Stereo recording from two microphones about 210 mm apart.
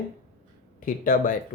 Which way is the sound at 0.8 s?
40° left (ahead or behind).